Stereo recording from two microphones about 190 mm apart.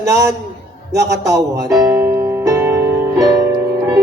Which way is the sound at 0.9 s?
15° right (ahead or behind).